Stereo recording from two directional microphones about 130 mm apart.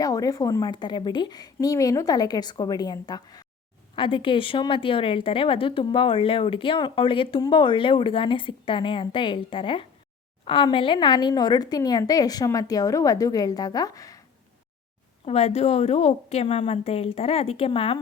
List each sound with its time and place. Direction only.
0.0 s a woman's voice: 30° left (ahead or behind)
3.9 s a woman's voice: 40° left (ahead or behind)
15.3 s a woman's voice: 55° left (ahead or behind)